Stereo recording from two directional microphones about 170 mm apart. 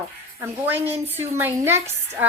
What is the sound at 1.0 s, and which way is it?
Speech, 10° right (ahead or behind).